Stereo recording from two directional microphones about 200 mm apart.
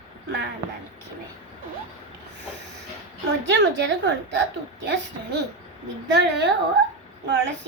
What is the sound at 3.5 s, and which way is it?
Speech, 65° right (ahead or behind).